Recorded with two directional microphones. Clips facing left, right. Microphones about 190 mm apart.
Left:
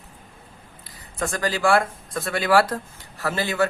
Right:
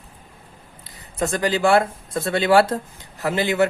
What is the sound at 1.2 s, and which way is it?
Speech, 20° right (ahead or behind).